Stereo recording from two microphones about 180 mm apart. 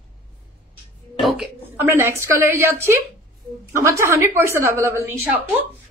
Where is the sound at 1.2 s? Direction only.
Centre (ahead or behind).